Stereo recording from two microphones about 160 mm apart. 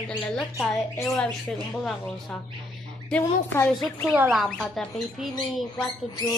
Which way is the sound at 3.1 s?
15° left (ahead or behind).